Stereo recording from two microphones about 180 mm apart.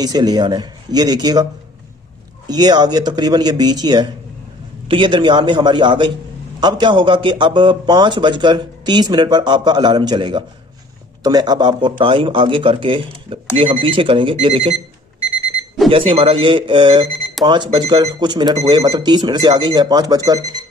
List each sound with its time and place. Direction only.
0.0 s speech: 20° right (ahead or behind)
16.1 s speech: 30° right (ahead or behind)